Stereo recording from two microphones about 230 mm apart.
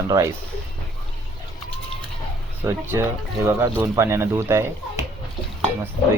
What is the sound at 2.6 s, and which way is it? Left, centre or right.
Speech, centre.